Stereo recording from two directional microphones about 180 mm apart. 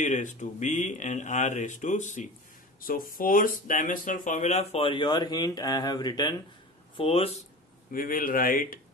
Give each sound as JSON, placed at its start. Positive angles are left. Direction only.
{"t": 0.0, "sound": "speech", "side_deg": 45}
{"t": 2.8, "sound": "speech", "side_deg": 50}
{"t": 7.9, "sound": "speech", "side_deg": 50}